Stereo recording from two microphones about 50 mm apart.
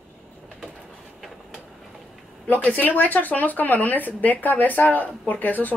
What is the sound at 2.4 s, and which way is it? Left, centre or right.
Speech, left.